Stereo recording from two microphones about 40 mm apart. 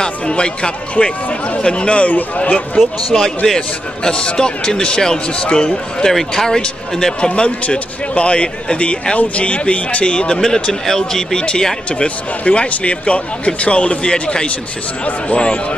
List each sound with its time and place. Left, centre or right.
0.0 s a man's voice: left
3.4 s a man's voice: centre
7.2 s a man's voice: left
10.4 s speech: centre
12.4 s a man's voice: left